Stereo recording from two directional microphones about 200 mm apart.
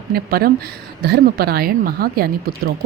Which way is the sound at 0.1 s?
50° right (ahead or behind).